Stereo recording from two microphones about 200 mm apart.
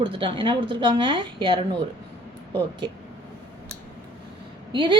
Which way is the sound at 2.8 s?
20° right (ahead or behind).